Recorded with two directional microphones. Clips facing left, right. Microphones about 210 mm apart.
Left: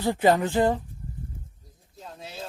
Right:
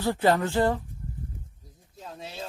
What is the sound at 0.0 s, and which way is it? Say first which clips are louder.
Speech: left 2 dB; 15° left (ahead or behind).